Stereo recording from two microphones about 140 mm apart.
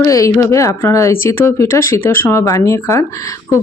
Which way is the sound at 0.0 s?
20° left (ahead or behind).